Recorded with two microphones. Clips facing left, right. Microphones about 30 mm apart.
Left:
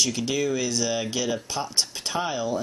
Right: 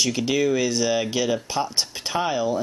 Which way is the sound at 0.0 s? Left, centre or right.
Centre.